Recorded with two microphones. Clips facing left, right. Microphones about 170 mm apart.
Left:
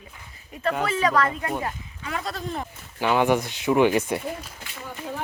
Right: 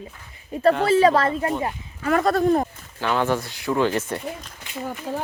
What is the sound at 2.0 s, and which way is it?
Speech, 55° right (ahead or behind).